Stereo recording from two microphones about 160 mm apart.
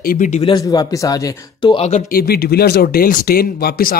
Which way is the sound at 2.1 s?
75° left (ahead or behind).